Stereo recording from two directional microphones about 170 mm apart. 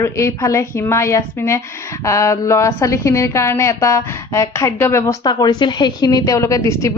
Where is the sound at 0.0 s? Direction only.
15° left (ahead or behind).